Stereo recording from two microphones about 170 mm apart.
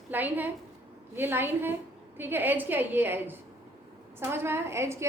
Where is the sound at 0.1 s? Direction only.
10° right (ahead or behind).